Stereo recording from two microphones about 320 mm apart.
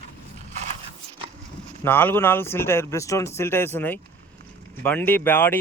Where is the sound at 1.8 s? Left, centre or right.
Centre.